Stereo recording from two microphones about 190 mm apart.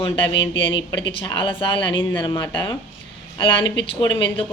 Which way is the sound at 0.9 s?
25° left (ahead or behind).